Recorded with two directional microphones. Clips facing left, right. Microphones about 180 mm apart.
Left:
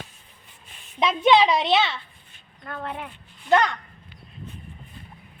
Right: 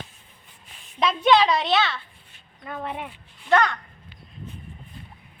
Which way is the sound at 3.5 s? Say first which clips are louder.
Left 1 dB; 15° left (ahead or behind).